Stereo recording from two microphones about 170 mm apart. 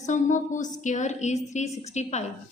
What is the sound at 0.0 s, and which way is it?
A woman's voice, 45° left (ahead or behind).